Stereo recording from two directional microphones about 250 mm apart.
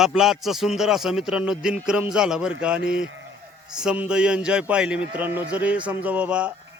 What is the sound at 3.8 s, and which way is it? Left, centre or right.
A man's voice, centre.